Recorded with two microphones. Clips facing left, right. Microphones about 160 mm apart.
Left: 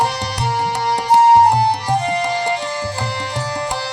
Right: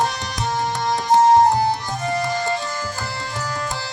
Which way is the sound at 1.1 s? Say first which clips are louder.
Left 3 dB; 65° left (ahead or behind).